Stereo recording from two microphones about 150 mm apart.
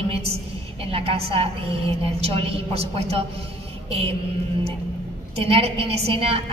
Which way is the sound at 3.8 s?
40° right (ahead or behind).